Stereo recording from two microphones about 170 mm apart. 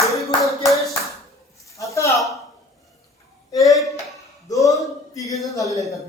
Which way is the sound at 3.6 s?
Centre (ahead or behind).